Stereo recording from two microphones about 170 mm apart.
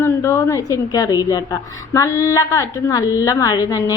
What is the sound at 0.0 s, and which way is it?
A woman's voice, 15° left (ahead or behind).